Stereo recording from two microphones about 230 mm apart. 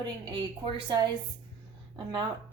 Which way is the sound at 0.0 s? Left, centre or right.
Centre.